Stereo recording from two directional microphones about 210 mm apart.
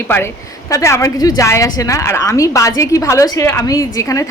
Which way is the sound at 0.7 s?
15° left (ahead or behind).